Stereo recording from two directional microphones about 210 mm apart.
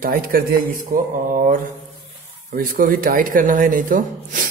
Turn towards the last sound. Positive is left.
turn(degrees=-40)  # may be behind; listen again after turning